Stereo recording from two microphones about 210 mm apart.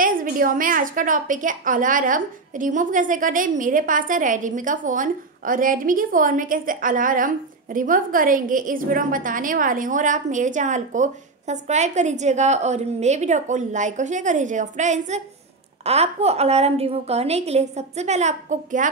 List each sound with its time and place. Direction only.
0.0 s a woman's voice: 40° right (ahead or behind)